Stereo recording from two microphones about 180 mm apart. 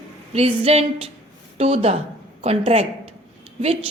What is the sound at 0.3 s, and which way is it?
A woman's voice, 35° right (ahead or behind).